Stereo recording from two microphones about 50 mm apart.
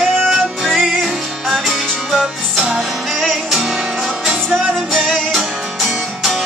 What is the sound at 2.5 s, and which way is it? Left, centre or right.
Music, centre.